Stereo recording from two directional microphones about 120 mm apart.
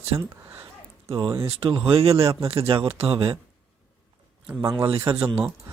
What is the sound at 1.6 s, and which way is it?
Speech, 45° right (ahead or behind).